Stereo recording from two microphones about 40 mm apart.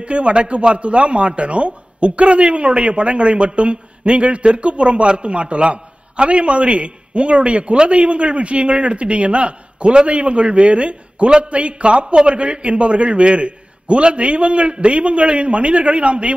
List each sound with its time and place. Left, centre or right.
0.0 s a man's voice: right